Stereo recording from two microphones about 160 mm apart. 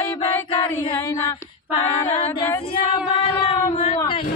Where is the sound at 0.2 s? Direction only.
35° left (ahead or behind).